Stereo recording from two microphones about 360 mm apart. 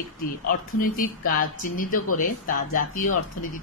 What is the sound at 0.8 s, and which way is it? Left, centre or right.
Speech, left.